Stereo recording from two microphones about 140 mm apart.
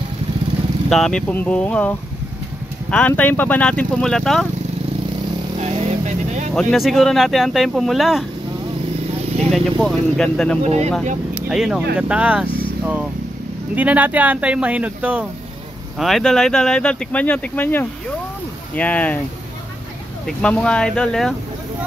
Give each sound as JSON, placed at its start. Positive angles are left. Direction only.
{"t": 0.8, "sound": "speech", "side_deg": 5}
{"t": 5.6, "sound": "vehicle", "side_deg": -50}
{"t": 6.5, "sound": "speech", "side_deg": 5}
{"t": 9.5, "sound": "speech", "side_deg": 0}
{"t": 10.6, "sound": "speech", "side_deg": -50}
{"t": 11.3, "sound": "speech", "side_deg": -5}
{"t": 20.2, "sound": "speech", "side_deg": 5}